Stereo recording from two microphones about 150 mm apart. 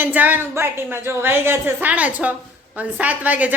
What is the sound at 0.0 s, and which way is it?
A woman's voice, 10° right (ahead or behind).